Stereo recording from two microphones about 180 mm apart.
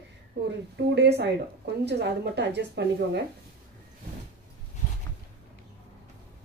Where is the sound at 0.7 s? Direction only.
70° right (ahead or behind).